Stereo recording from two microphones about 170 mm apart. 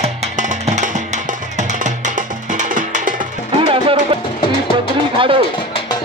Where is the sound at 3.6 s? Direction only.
30° right (ahead or behind).